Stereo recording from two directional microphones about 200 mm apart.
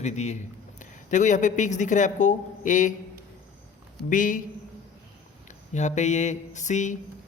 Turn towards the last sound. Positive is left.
turn(degrees=35)  # may be behind; listen again after turning